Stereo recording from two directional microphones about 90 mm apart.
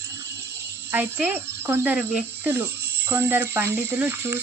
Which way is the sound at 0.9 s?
20° right (ahead or behind).